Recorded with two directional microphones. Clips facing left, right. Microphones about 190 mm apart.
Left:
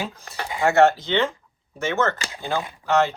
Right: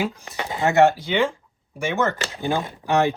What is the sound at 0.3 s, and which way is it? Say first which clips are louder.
Speech: left 5 dB; 20° right (ahead or behind).